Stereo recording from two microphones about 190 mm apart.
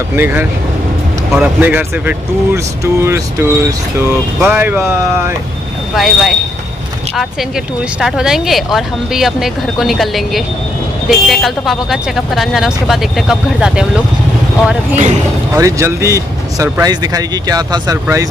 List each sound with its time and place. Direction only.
0.1 s speech: 10° right (ahead or behind)
5.9 s speech: centre (ahead or behind)
8.0 s speech: centre (ahead or behind)
15.5 s speech: 15° right (ahead or behind)